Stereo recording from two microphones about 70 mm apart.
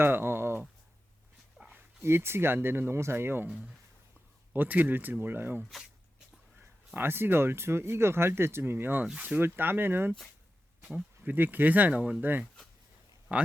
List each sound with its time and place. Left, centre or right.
0.0 s a sound: right
1.6 s dog: centre
2.0 s speech: right
4.5 s speech: right
6.9 s speech: right
11.2 s speech: right